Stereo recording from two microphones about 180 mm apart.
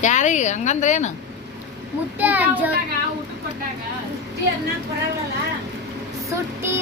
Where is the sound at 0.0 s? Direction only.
40° left (ahead or behind).